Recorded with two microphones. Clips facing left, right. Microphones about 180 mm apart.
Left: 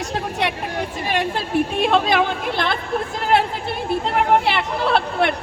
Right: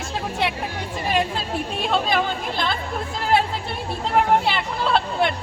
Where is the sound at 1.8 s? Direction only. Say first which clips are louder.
Left 3 dB; 70° left (ahead or behind).